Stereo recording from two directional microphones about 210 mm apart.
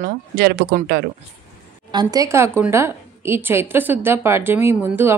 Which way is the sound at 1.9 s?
20° right (ahead or behind).